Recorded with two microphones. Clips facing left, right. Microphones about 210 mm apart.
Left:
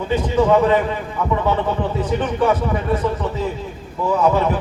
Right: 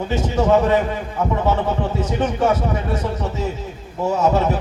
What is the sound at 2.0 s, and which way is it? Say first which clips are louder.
A man's voice: left 1 dB; 45° right (ahead or behind).